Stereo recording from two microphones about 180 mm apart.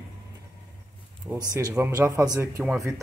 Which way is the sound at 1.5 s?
20° right (ahead or behind).